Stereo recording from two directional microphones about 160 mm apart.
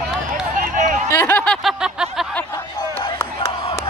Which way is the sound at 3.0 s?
20° left (ahead or behind).